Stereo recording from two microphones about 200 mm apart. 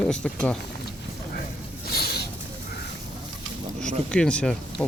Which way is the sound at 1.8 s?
50° left (ahead or behind).